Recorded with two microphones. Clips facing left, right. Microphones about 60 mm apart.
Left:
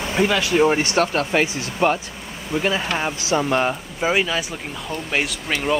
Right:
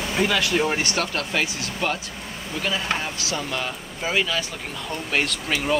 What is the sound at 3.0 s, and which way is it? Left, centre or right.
Speech, left.